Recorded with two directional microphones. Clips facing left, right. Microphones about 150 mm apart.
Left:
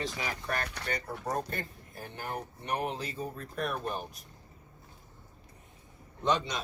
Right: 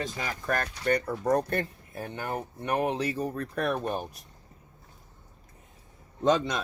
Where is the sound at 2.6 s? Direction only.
65° right (ahead or behind).